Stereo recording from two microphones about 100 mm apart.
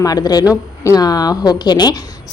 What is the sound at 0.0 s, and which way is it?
Speech, 40° left (ahead or behind).